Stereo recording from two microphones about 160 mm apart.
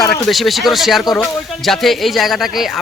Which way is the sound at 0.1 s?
Centre (ahead or behind).